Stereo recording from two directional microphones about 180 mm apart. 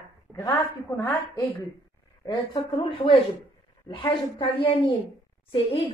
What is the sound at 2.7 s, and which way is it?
A woman's voice, 30° left (ahead or behind).